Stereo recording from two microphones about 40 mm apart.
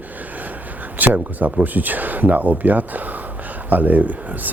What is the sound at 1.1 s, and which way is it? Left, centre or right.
Speech, right.